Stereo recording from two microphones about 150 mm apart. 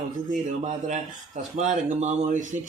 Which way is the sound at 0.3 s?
55° right (ahead or behind).